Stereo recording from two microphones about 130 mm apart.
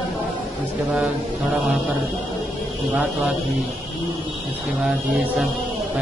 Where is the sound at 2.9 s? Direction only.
5° right (ahead or behind).